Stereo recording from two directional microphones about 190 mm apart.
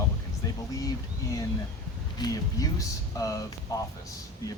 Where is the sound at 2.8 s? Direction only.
20° left (ahead or behind).